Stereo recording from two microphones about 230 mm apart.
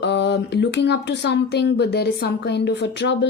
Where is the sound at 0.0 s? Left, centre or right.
Left.